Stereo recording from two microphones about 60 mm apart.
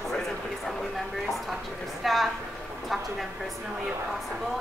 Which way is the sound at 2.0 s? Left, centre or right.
Centre.